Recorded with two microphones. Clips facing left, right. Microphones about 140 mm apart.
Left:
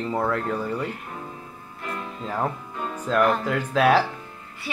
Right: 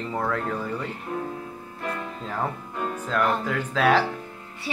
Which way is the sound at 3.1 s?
10° left (ahead or behind).